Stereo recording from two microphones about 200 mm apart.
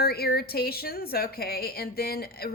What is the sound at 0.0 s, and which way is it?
Speech, 50° left (ahead or behind).